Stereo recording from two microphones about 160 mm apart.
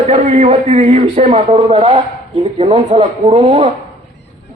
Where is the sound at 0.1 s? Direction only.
40° right (ahead or behind).